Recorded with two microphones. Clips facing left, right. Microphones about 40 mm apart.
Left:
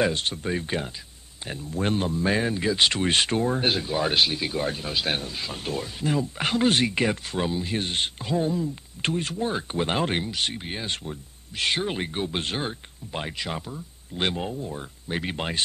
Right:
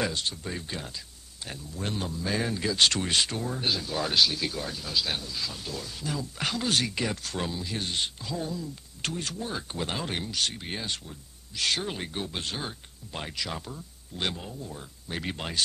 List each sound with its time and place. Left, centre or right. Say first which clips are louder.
0.0 s speech: left 6 dB; left
1.7 s speech: left 8 dB; left
2.4 s speech: left 3 dB; left
7.3 s speech: left 6 dB; left
7.6 s speech: left 4 dB; left
10.2 s speech: left 2 dB; left
10.9 s speech: left 4 dB; left
13.1 s speech: left 4 dB; left